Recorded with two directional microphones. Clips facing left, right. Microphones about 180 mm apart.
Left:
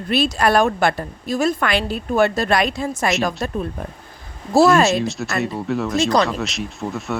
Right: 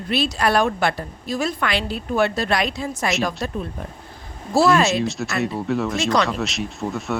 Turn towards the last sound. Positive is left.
turn(degrees=0)  # may be behind; listen again after turning